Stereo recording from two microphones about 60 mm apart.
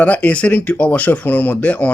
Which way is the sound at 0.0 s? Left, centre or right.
Left.